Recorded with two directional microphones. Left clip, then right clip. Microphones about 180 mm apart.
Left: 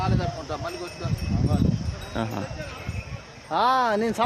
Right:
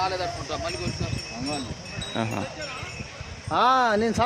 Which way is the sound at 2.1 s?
5° right (ahead or behind).